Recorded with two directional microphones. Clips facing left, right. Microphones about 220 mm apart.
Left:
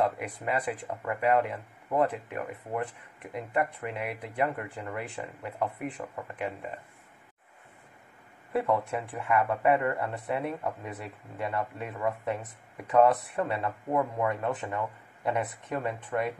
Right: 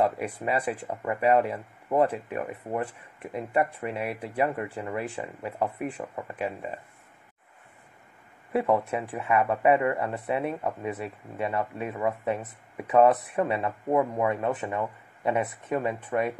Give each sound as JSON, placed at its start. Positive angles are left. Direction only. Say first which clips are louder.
{"t": 0.0, "sound": "speech", "louder": "right 3 dB", "side_deg": -25}
{"t": 8.5, "sound": "speech", "louder": "right 3 dB", "side_deg": -20}